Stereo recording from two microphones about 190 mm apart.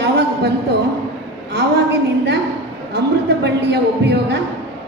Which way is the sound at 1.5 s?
60° right (ahead or behind).